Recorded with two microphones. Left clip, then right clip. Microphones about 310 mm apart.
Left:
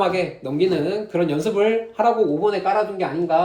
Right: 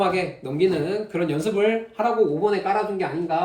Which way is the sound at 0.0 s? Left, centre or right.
Centre.